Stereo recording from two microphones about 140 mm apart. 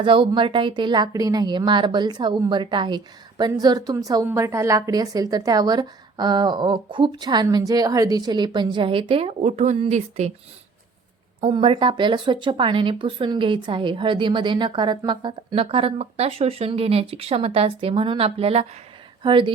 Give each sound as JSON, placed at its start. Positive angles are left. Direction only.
{"t": 0.0, "sound": "a woman's voice", "side_deg": -35}
{"t": 11.3, "sound": "speech", "side_deg": -40}